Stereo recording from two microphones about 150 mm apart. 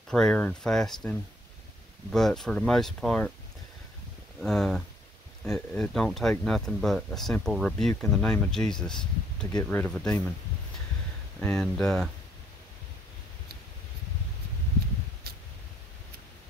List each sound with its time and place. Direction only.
0.1 s speech: 5° left (ahead or behind)
4.4 s speech: 5° left (ahead or behind)
11.3 s speech: 5° left (ahead or behind)
15.3 s a sound: 90° right